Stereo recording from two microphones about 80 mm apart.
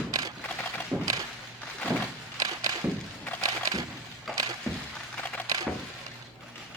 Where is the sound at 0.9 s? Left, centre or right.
Right.